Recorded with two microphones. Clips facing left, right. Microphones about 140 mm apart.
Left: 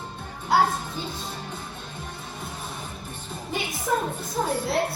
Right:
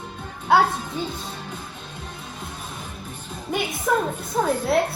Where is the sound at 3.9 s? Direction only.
65° right (ahead or behind).